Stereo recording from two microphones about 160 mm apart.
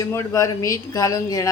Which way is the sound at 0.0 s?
20° left (ahead or behind).